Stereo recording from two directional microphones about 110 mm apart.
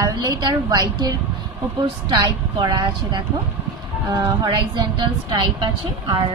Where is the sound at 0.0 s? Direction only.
30° right (ahead or behind); by 6.1 s 50° right (ahead or behind).